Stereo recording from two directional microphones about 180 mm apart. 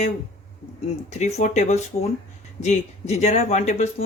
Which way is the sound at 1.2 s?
40° left (ahead or behind).